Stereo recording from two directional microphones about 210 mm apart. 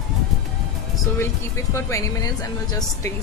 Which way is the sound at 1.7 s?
15° left (ahead or behind).